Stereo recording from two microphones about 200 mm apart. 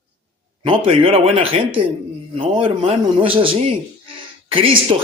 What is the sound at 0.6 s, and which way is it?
Speech, 25° right (ahead or behind).